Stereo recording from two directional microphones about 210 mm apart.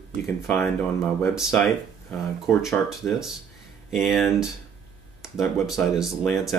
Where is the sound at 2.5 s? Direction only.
15° left (ahead or behind).